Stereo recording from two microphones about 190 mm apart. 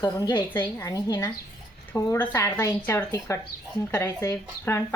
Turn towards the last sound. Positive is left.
turn(degrees=15)  # may be behind; listen again after turning